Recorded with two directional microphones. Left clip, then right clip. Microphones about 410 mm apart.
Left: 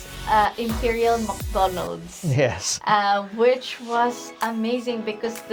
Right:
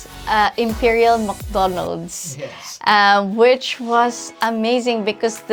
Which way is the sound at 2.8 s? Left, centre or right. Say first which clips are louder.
Right 7 dB; right.